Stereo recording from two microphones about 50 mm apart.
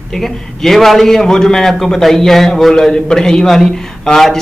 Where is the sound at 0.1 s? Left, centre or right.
Centre.